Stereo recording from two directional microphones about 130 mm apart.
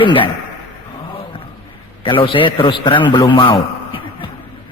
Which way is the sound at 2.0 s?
40° left (ahead or behind).